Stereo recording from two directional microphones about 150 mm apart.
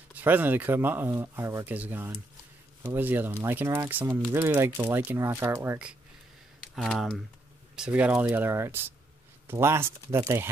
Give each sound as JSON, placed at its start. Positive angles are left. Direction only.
{"t": 0.1, "sound": "speech", "side_deg": -10}
{"t": 6.7, "sound": "speech", "side_deg": 0}